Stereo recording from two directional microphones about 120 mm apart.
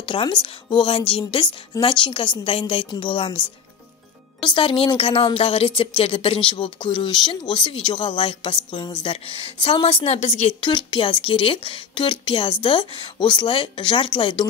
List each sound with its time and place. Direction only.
0.0 s speech: 45° left (ahead or behind)
4.5 s speech: 50° left (ahead or behind); by 10.5 s 65° left (ahead or behind)
10.6 s speech: 40° left (ahead or behind)